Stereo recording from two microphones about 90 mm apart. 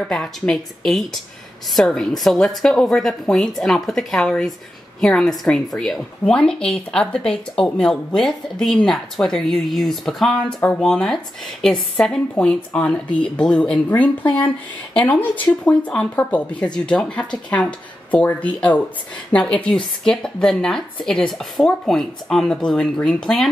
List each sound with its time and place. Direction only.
0.0 s a woman's voice: 5° left (ahead or behind)